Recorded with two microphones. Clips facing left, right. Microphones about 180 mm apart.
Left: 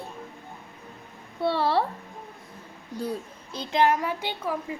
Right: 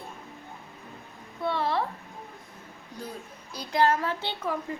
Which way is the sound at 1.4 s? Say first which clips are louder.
Left 4 dB; 35° left (ahead or behind).